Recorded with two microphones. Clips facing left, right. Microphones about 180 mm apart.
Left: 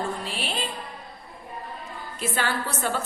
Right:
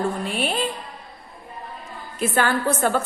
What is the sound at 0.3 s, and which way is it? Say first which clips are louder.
Music: right 7 dB; 55° right (ahead or behind).